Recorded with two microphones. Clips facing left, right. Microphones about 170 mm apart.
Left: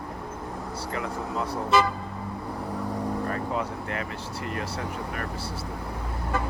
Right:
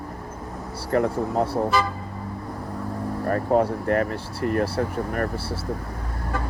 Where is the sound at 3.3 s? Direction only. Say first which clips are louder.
Right 9 dB; 50° right (ahead or behind).